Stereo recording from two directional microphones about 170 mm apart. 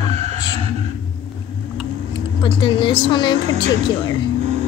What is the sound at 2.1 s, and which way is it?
Speech, 30° left (ahead or behind).